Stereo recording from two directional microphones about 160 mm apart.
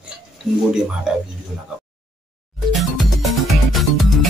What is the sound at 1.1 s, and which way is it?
Speech, 5° right (ahead or behind).